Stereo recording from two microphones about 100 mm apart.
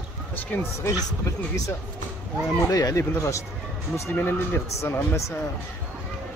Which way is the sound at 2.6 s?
35° left (ahead or behind).